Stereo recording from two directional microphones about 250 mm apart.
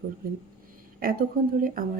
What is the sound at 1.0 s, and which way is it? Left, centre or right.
Speech, right.